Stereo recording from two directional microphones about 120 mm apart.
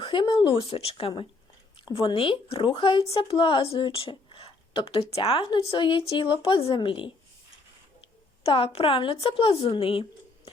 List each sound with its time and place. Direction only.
0.0 s a woman's voice: 45° left (ahead or behind)
8.4 s speech: 55° left (ahead or behind)